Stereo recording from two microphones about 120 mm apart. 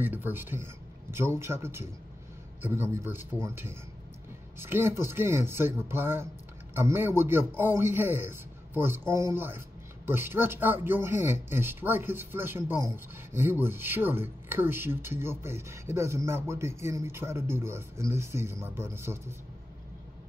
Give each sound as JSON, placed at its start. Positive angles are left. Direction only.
{"t": 0.0, "sound": "a man's voice", "side_deg": -15}